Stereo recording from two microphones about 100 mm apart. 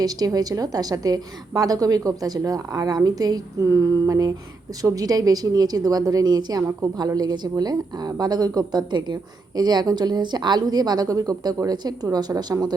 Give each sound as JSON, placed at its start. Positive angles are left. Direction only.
{"t": 0.0, "sound": "speech", "side_deg": -40}